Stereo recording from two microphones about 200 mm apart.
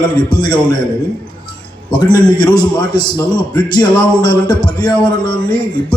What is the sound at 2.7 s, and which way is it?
Speech, 20° left (ahead or behind).